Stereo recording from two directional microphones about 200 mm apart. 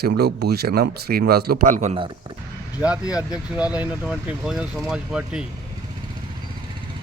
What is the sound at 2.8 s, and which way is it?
Speech, 5° right (ahead or behind).